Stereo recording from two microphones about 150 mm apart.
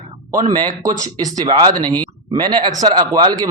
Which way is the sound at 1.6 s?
30° right (ahead or behind).